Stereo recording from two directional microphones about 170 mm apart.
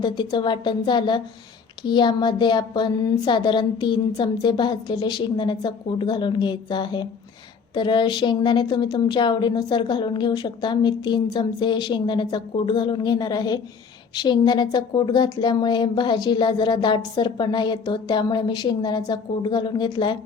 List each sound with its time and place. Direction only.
0.0 s a woman's voice: 25° left (ahead or behind)